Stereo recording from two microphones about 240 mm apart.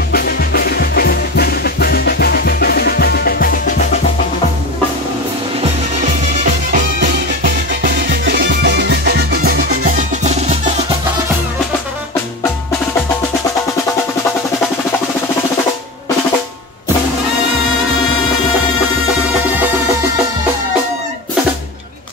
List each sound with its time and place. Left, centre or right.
0.1 s music: left
6.7 s music: right